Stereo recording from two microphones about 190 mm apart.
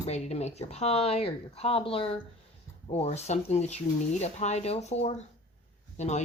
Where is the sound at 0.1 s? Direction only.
35° left (ahead or behind).